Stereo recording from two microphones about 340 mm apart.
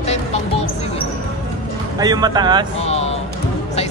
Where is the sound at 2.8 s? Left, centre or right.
Centre.